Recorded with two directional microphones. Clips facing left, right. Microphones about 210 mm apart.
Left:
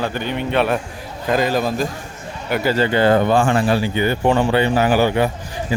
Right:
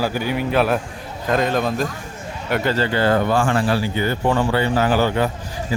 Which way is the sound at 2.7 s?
20° left (ahead or behind).